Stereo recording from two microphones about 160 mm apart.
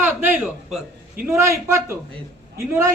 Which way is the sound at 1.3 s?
15° right (ahead or behind).